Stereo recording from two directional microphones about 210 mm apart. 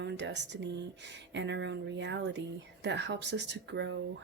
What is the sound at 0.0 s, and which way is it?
Speech, 55° right (ahead or behind).